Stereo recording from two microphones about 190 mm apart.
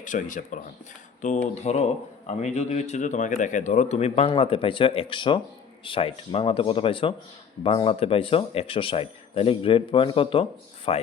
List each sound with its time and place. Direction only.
0.0 s a man's voice: 45° left (ahead or behind)